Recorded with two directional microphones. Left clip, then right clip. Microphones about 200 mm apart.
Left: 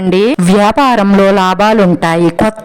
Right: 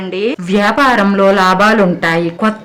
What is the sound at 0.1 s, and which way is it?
A man's voice, 50° left (ahead or behind).